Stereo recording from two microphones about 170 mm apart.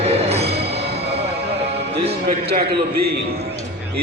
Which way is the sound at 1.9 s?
35° right (ahead or behind).